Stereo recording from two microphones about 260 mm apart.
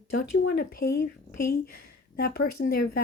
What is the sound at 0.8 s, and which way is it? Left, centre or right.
Speech, left.